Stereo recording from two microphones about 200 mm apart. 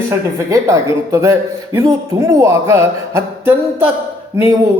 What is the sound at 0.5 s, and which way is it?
A man's voice, 15° right (ahead or behind).